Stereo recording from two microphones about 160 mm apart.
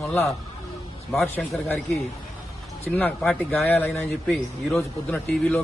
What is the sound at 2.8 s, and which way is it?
Speech, 10° left (ahead or behind).